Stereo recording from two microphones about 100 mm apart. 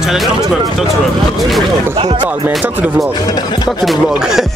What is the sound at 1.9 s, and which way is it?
Speech, 65° right (ahead or behind).